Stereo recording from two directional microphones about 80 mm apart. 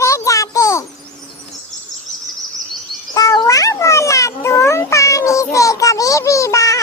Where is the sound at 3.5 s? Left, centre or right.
Left.